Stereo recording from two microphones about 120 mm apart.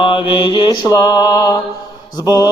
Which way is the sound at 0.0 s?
45° left (ahead or behind).